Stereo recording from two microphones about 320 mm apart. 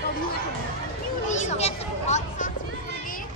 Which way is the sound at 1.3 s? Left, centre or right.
Left.